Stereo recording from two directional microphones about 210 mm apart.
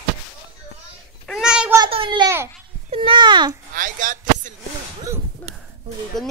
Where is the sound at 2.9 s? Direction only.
25° right (ahead or behind).